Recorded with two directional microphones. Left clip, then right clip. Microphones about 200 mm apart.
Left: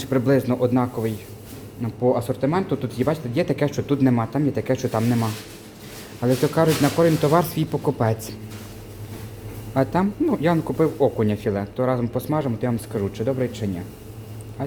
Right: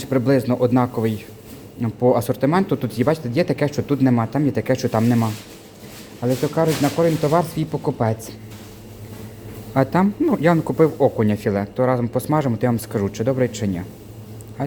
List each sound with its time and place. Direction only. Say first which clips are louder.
0.0 s speech: right 1 dB; 10° right (ahead or behind)
6.2 s speech: even; centre (ahead or behind)
9.7 s speech: right 3 dB; 15° right (ahead or behind)